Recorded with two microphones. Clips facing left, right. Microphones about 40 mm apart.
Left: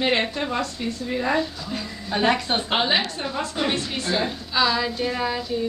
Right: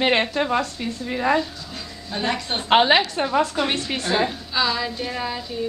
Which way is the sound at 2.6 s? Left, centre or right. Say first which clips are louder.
Right 8 dB; right.